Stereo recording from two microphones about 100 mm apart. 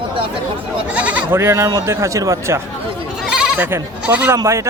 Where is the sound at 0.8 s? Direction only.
10° right (ahead or behind).